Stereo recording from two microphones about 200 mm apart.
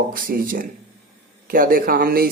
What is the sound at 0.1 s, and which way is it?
Speech, 45° right (ahead or behind).